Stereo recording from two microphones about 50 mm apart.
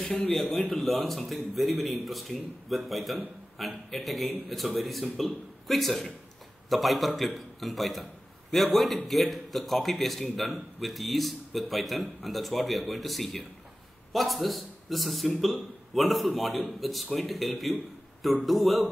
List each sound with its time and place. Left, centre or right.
0.3 s a man's voice: centre